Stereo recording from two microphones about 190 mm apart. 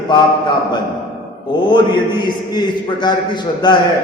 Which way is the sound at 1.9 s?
25° left (ahead or behind).